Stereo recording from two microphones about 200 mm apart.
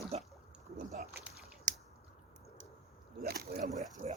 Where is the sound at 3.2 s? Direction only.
50° right (ahead or behind).